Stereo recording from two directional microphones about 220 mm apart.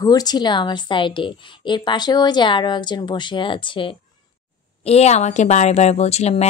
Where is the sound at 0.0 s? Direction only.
15° left (ahead or behind).